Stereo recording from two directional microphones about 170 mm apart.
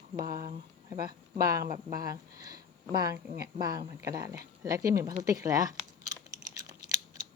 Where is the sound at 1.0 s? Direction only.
60° right (ahead or behind).